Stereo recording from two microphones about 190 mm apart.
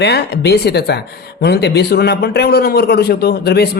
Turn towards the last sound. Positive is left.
turn(degrees=55)  # may be behind; listen again after turning